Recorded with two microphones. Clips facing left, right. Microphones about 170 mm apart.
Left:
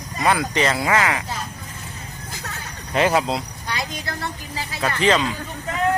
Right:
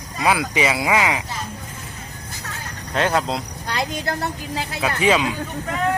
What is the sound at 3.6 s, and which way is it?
Speech, 50° right (ahead or behind).